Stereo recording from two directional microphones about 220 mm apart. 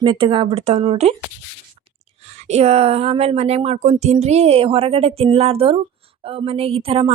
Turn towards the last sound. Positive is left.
turn(degrees=-25)  # may be behind; listen again after turning